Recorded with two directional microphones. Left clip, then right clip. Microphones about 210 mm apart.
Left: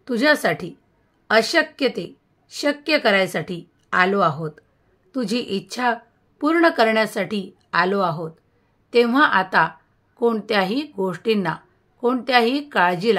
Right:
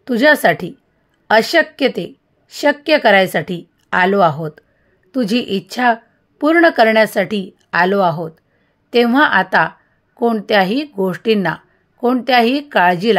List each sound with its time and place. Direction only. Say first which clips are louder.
0.0 s a woman's voice: right 7 dB; 30° right (ahead or behind)